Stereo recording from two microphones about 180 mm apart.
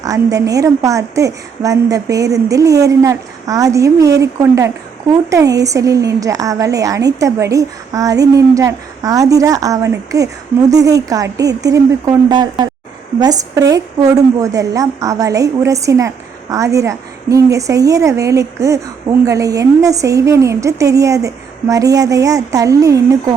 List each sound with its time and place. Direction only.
0.0 s a woman's voice: 20° right (ahead or behind)